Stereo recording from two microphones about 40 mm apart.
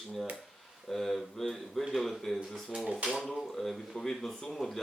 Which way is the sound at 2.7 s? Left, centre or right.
Centre.